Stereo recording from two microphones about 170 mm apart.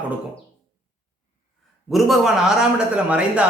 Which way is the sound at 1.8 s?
Centre (ahead or behind).